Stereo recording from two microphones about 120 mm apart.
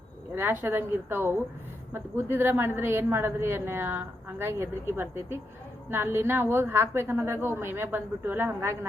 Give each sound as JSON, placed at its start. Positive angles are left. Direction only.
{"t": 0.3, "sound": "a woman's voice", "side_deg": -20}